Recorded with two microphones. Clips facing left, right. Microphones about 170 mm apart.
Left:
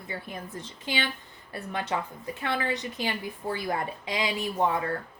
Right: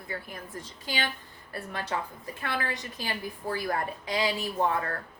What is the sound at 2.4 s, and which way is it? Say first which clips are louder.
A woman's voice: left 3 dB; 20° left (ahead or behind).